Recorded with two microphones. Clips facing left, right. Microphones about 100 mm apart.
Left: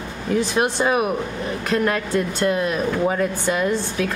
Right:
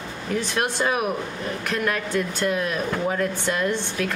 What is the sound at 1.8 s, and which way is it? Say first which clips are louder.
Speech: left 3 dB; 35° left (ahead or behind).